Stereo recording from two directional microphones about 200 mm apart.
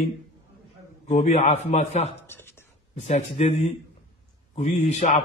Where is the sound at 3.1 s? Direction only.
35° left (ahead or behind).